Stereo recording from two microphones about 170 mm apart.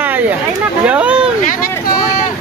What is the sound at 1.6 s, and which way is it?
Vehicle, 20° left (ahead or behind).